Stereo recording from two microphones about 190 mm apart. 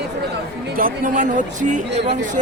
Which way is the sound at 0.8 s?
45° right (ahead or behind).